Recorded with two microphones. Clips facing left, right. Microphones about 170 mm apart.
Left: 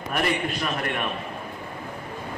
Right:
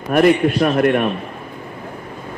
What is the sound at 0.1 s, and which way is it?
Speech, 55° right (ahead or behind).